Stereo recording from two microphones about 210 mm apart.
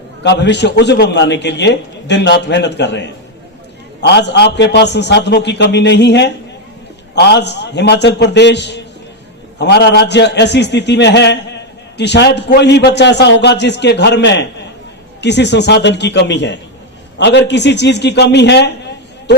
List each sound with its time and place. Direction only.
0.2 s a man's voice: 55° left (ahead or behind)